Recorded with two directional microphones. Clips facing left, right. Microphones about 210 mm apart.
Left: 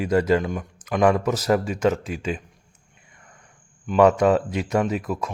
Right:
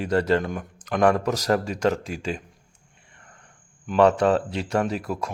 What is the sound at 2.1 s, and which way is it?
Speech, 40° right (ahead or behind).